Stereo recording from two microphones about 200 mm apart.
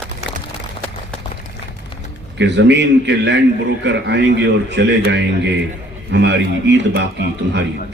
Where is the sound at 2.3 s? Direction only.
60° right (ahead or behind).